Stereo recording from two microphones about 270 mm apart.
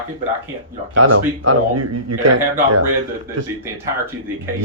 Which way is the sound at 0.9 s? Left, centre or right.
Right.